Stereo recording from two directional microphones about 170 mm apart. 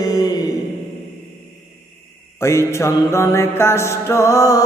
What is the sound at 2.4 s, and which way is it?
Mantra, 15° left (ahead or behind).